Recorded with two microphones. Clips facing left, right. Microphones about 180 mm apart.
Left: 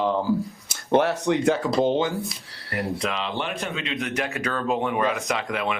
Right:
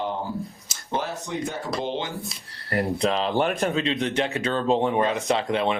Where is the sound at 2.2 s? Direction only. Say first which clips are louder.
Right 2 dB; 35° right (ahead or behind).